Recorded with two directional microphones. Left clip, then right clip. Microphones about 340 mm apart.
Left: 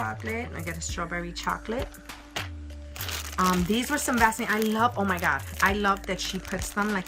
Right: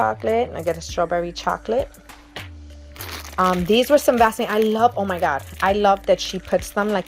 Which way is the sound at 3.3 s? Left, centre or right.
Centre.